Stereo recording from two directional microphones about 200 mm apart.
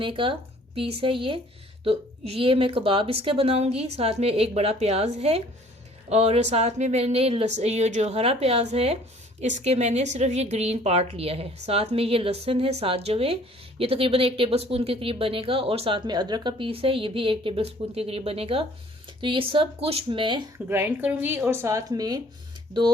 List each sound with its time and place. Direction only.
0.0 s a woman's voice: 25° right (ahead or behind)
20.7 s speech: 10° right (ahead or behind)